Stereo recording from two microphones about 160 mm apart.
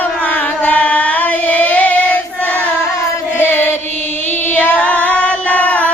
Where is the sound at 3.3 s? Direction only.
15° left (ahead or behind).